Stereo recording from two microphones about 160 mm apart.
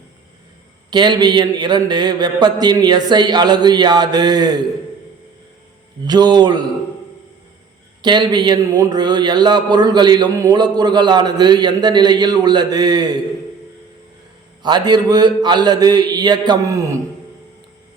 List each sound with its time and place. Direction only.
0.9 s a man's voice: 30° right (ahead or behind)
6.1 s a man's voice: 25° right (ahead or behind)
8.0 s a man's voice: 25° right (ahead or behind)
14.6 s a man's voice: 25° right (ahead or behind)